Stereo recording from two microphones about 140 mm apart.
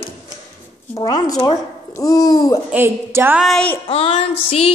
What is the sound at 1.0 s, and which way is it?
Speech, 25° left (ahead or behind).